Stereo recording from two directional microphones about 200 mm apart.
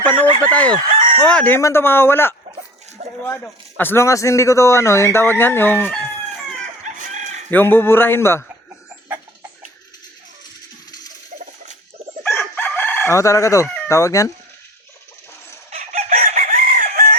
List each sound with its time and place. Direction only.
0.0 s a man's voice: 10° left (ahead or behind)
0.9 s chicken: 45° right (ahead or behind)
1.2 s a man's voice: 5° left (ahead or behind)
6.8 s chicken: 40° right (ahead or behind)
7.5 s a man's voice: 10° left (ahead or behind)
11.3 s a sound: 35° right (ahead or behind)
12.2 s chicken: 5° left (ahead or behind)
15.7 s chicken: 35° right (ahead or behind)